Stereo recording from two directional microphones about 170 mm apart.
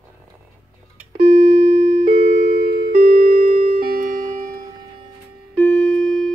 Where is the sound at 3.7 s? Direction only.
60° right (ahead or behind).